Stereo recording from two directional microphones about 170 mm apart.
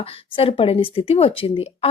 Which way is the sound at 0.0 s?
35° left (ahead or behind).